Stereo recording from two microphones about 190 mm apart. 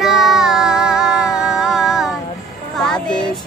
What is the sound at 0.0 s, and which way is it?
Music, centre (ahead or behind).